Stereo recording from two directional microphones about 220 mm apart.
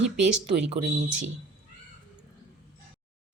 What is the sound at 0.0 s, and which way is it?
Speech, 5° right (ahead or behind).